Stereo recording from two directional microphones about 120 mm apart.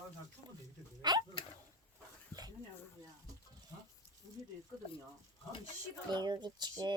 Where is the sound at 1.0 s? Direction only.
35° right (ahead or behind).